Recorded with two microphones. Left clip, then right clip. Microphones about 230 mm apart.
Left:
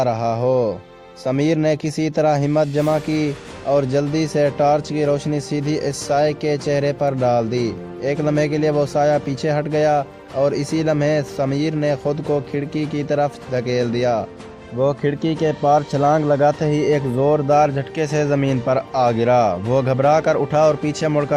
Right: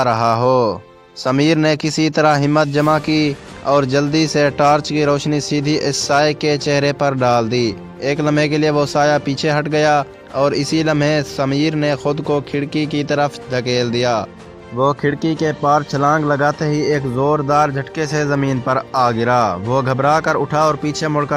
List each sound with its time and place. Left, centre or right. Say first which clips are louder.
0.0 s speech: right 4 dB; right